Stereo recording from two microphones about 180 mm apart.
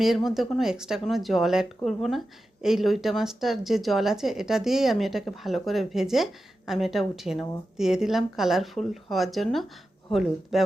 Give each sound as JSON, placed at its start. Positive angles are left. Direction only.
{"t": 0.3, "sound": "speech", "side_deg": 0}